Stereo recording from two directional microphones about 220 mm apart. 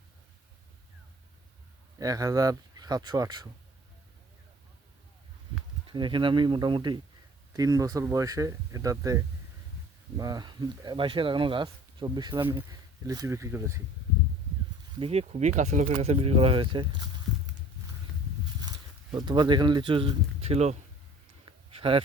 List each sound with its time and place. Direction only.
2.0 s speech: 15° right (ahead or behind)
5.9 s speech: 20° right (ahead or behind)
14.9 s speech: 25° right (ahead or behind)
19.1 s speech: 20° right (ahead or behind)
21.7 s a sound: 25° right (ahead or behind)